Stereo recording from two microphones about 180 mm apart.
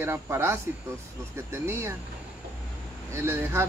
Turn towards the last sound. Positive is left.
turn(degrees=-15)  # may be behind; listen again after turning